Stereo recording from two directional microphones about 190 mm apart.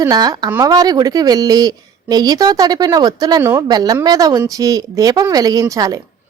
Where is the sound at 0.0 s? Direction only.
20° right (ahead or behind).